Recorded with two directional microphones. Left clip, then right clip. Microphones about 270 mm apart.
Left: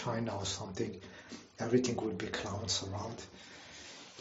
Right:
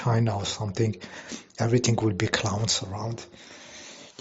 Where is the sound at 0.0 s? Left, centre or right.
Right.